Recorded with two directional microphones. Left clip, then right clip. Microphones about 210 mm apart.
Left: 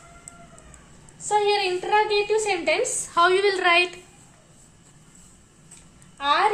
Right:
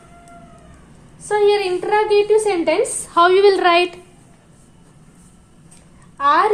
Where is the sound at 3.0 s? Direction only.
25° right (ahead or behind).